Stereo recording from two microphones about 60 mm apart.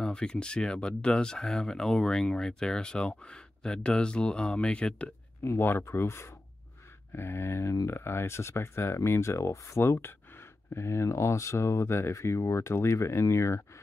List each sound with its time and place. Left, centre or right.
0.0 s speech: centre
5.4 s speech: left